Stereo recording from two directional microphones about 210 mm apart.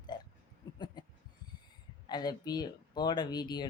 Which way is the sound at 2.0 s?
20° left (ahead or behind).